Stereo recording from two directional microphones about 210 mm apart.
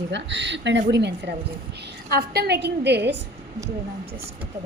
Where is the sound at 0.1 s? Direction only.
55° right (ahead or behind).